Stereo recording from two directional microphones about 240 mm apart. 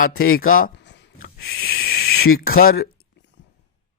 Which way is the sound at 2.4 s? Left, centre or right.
Left.